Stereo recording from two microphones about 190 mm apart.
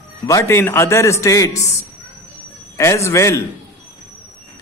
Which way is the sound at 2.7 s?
15° left (ahead or behind).